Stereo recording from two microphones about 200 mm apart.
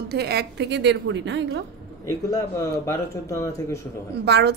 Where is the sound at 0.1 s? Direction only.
55° right (ahead or behind).